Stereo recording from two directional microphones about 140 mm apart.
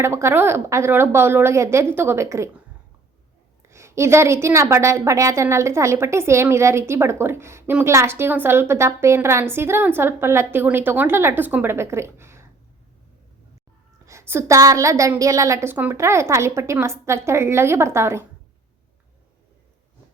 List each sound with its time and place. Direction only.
0.0 s a woman's voice: 20° right (ahead or behind)
3.6 s a woman's voice: 20° right (ahead or behind)
14.0 s a woman's voice: 20° right (ahead or behind)